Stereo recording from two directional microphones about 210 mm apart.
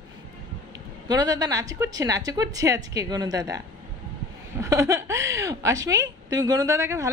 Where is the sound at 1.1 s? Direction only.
20° right (ahead or behind).